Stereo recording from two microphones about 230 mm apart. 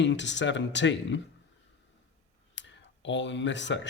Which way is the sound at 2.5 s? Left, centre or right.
Left.